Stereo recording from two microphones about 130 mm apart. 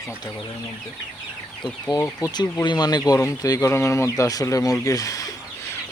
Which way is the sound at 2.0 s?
25° left (ahead or behind).